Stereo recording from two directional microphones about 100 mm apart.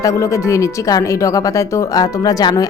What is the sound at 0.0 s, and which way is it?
Speech, 30° left (ahead or behind).